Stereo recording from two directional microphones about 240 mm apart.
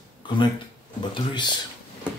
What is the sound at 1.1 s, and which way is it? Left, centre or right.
Speech, centre.